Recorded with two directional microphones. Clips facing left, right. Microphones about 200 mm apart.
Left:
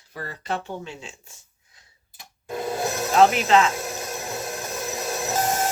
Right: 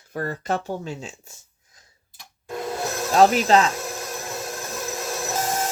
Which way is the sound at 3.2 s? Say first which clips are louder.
Right 1 dB; 35° right (ahead or behind).